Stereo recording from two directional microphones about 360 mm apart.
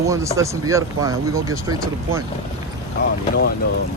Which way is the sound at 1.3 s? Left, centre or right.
Right.